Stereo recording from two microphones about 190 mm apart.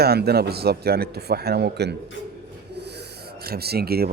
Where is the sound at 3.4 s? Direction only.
55° right (ahead or behind).